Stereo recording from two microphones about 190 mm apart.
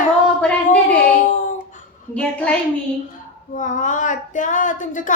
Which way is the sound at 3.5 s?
45° left (ahead or behind).